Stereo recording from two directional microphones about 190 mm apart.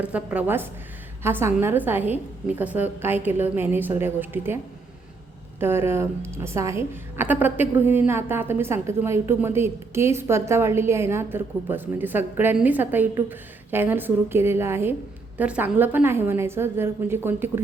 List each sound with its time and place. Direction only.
0.0 s a woman's voice: 5° right (ahead or behind)